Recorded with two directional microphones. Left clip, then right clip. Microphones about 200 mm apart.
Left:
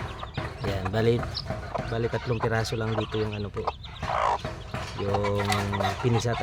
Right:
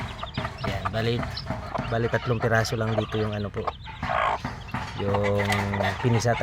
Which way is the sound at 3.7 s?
10° left (ahead or behind).